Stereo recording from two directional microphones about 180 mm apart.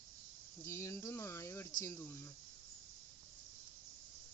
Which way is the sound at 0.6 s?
15° left (ahead or behind).